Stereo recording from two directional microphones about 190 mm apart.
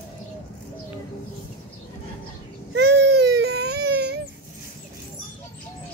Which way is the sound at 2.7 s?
65° right (ahead or behind).